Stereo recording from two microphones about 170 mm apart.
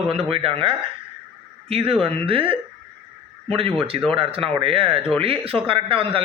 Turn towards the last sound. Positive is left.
turn(degrees=-30)  # may be behind; listen again after turning